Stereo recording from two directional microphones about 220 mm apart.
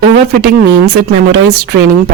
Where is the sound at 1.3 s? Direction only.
45° right (ahead or behind).